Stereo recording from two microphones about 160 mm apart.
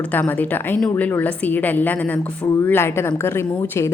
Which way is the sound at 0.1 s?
10° left (ahead or behind).